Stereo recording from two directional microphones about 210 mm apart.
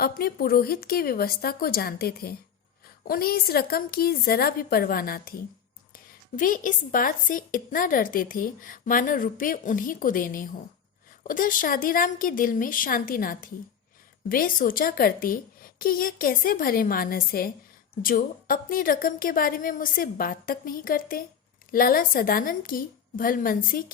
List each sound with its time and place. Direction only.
0.0 s a woman's voice: 45° left (ahead or behind)
6.3 s a woman's voice: 40° left (ahead or behind)